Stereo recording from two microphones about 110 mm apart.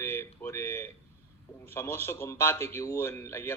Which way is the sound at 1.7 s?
20° left (ahead or behind).